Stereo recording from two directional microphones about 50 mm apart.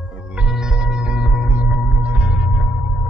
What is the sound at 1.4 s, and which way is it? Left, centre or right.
Music, right.